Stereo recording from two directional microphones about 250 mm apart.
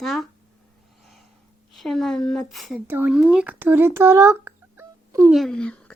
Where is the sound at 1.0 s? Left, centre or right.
Centre.